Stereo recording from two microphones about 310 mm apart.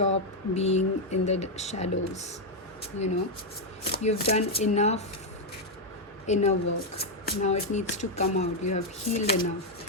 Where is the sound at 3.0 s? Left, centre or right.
Left.